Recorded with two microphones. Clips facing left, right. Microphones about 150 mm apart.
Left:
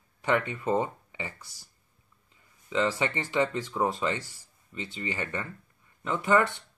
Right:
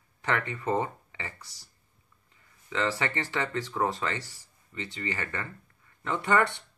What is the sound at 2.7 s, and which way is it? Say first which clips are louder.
Speech: left 2 dB; 15° left (ahead or behind).